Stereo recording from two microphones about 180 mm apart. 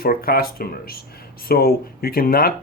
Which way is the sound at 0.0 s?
55° left (ahead or behind).